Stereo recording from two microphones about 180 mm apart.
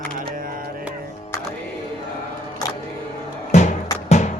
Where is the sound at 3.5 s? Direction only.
40° left (ahead or behind).